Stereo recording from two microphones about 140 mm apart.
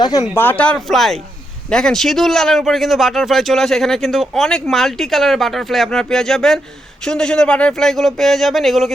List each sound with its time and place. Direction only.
0.0 s speech: 25° left (ahead or behind)
0.3 s speech: 10° left (ahead or behind)